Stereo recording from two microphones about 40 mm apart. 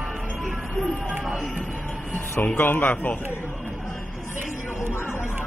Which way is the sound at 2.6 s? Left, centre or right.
Left.